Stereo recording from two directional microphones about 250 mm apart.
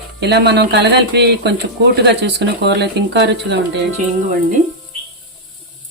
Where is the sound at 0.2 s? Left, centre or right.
Right.